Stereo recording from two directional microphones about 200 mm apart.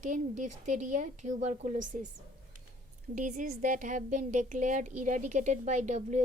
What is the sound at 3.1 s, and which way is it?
A woman's voice, 40° right (ahead or behind).